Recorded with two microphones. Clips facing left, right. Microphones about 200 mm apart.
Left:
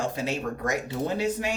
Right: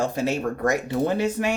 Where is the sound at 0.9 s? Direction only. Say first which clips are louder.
Right 4 dB; 60° right (ahead or behind).